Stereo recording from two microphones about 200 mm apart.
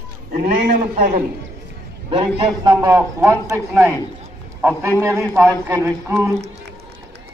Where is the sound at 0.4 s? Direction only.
40° right (ahead or behind).